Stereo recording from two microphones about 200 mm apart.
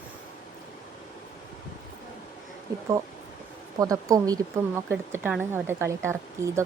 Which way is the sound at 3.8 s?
15° right (ahead or behind).